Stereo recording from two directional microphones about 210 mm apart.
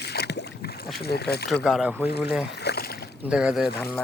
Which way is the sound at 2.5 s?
50° left (ahead or behind).